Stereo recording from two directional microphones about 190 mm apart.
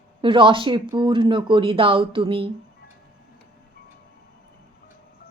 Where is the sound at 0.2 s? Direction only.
25° right (ahead or behind).